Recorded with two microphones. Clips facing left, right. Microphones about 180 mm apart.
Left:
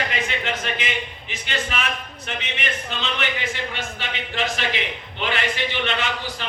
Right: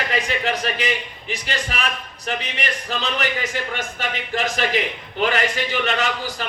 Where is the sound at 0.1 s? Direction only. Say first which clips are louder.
Right 4 dB; 35° right (ahead or behind).